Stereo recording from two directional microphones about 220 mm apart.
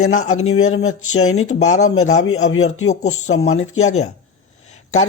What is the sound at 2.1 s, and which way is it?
Speech, 70° left (ahead or behind).